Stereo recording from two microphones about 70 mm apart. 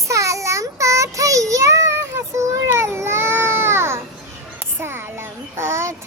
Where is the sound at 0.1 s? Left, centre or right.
Right.